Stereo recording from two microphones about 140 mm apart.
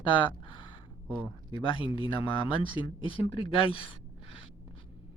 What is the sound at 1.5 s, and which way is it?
Speech, 40° left (ahead or behind).